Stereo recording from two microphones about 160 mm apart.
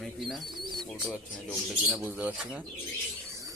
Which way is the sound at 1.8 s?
10° right (ahead or behind).